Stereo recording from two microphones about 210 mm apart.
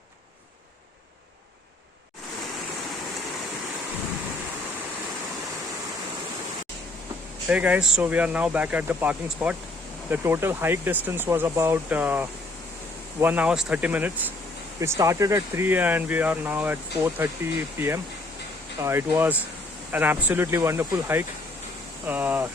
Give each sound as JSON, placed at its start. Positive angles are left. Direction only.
{"t": 7.4, "sound": "speech", "side_deg": -5}
{"t": 13.2, "sound": "speech", "side_deg": -5}